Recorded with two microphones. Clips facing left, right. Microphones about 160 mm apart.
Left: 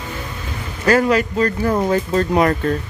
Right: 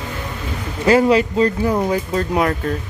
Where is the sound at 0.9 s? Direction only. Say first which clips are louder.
Right 2 dB; 20° right (ahead or behind).